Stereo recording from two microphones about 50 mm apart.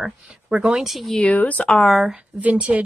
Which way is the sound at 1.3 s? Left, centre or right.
Left.